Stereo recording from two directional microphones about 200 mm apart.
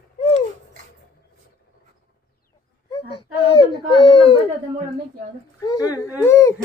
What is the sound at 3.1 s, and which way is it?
Wail, 25° left (ahead or behind).